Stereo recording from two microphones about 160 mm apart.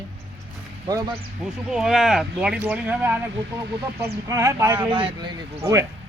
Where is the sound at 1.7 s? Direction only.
5° right (ahead or behind).